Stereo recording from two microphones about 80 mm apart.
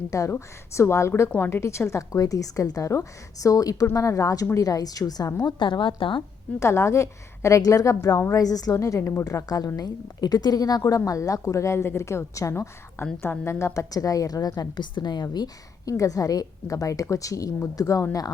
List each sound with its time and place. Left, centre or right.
0.1 s a woman's voice: left
6.6 s a woman's voice: left
9.2 s a woman's voice: left
13.0 s a woman's voice: left
14.9 s a woman's voice: left
15.9 s a woman's voice: left